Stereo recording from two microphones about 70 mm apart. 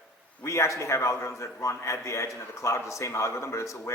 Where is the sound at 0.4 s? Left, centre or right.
Left.